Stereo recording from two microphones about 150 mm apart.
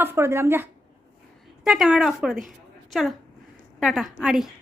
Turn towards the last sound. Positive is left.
turn(degrees=-5)  # may be behind; listen again after turning